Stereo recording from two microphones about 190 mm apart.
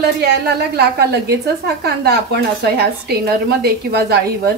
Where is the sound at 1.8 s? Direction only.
60° right (ahead or behind).